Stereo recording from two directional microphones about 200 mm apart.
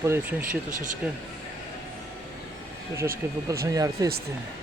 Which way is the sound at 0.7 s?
40° right (ahead or behind).